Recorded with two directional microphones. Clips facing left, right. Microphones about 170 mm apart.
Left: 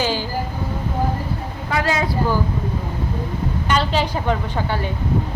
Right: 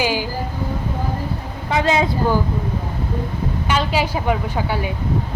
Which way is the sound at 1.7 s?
20° right (ahead or behind).